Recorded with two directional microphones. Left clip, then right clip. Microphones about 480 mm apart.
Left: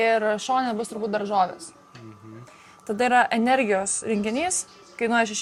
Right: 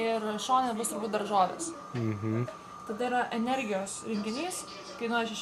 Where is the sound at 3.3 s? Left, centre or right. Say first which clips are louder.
Left 10 dB; left.